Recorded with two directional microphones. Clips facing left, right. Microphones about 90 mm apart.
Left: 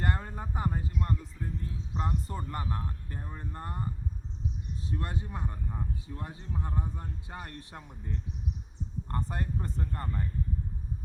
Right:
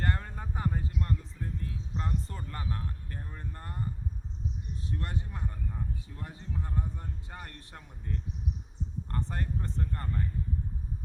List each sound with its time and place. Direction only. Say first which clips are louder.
0.0 s a sound: left 1 dB; 15° left (ahead or behind)
2.0 s speech: left 3 dB; 15° left (ahead or behind)
4.9 s speech: left 2 dB; 15° left (ahead or behind)